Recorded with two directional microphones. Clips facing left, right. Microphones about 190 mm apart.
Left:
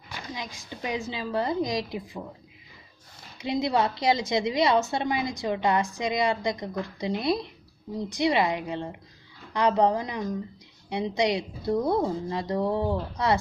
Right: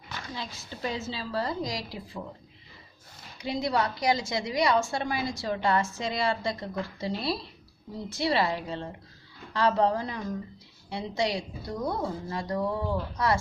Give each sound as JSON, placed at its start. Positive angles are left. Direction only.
{"t": 0.3, "sound": "a woman's voice", "side_deg": 15}
{"t": 3.3, "sound": "a woman's voice", "side_deg": 20}